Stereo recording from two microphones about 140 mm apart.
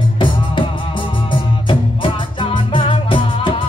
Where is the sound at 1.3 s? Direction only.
35° left (ahead or behind).